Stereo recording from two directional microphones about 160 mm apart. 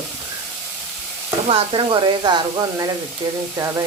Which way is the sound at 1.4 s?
35° right (ahead or behind).